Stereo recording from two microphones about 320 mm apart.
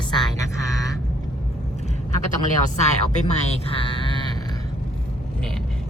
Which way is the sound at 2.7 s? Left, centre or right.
Left.